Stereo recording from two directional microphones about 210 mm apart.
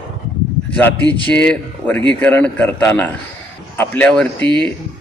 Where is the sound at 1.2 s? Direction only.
5° left (ahead or behind).